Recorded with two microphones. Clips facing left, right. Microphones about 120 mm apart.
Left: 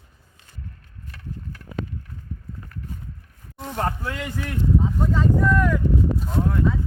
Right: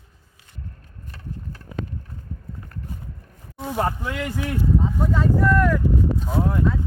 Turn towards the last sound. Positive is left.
turn(degrees=0)  # may be behind; listen again after turning